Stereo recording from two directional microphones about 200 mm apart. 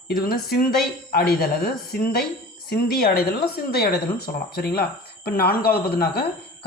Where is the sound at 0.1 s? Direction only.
50° left (ahead or behind).